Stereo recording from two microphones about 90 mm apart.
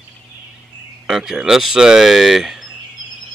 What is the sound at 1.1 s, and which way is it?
Speech, 5° right (ahead or behind).